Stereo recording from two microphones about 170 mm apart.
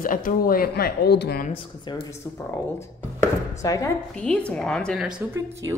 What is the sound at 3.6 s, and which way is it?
Speech, 20° left (ahead or behind).